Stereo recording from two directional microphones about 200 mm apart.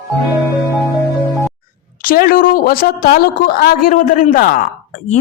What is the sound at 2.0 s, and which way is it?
A woman's voice, 50° left (ahead or behind).